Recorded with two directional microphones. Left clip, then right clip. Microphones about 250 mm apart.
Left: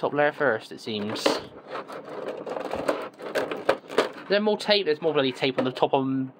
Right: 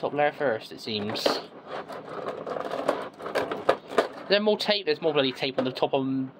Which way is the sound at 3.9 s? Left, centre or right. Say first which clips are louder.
Even; centre.